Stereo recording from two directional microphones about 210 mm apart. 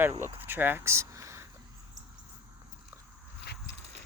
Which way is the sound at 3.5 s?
50° left (ahead or behind).